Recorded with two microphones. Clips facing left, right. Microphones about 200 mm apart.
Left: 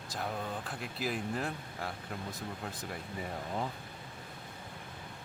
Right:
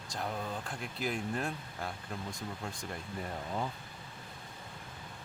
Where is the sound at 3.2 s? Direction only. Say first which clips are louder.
Even; 5° left (ahead or behind).